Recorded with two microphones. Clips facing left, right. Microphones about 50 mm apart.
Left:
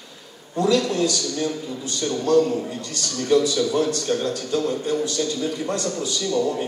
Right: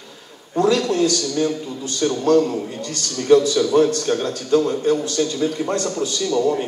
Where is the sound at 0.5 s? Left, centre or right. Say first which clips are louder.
Right 3 dB; right.